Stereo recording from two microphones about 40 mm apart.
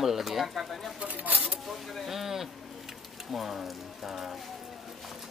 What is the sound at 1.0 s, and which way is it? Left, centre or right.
Speech, right.